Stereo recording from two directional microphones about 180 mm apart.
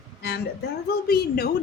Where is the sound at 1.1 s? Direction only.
60° left (ahead or behind).